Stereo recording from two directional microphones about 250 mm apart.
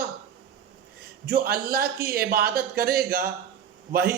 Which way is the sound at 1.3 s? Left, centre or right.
Right.